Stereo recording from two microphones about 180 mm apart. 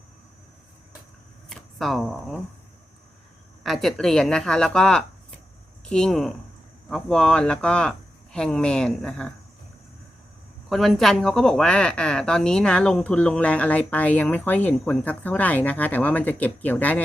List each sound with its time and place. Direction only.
1.5 s shuffling cards: centre (ahead or behind)
3.6 s speech: centre (ahead or behind)
10.7 s a woman's voice: centre (ahead or behind)